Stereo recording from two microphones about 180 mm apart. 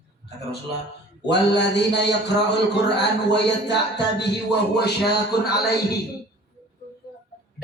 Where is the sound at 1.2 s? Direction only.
70° left (ahead or behind).